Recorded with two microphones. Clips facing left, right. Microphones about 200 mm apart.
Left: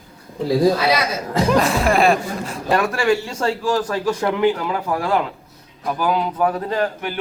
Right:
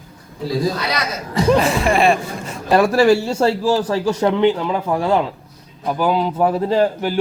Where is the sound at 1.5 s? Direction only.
Centre (ahead or behind).